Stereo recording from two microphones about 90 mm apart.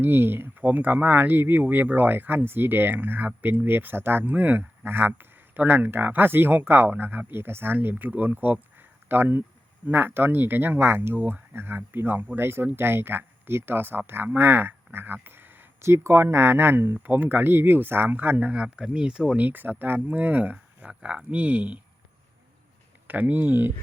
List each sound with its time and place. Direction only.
0.0 s speech: 25° right (ahead or behind)
23.0 s speech: 20° right (ahead or behind)